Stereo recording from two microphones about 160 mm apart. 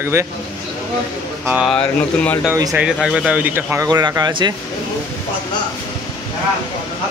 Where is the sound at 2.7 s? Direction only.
5° right (ahead or behind).